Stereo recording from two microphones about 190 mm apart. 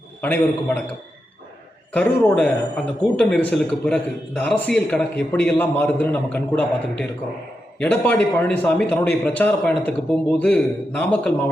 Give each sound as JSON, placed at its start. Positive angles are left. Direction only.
{"t": 0.2, "sound": "speech", "side_deg": 10}
{"t": 1.9, "sound": "speech", "side_deg": 10}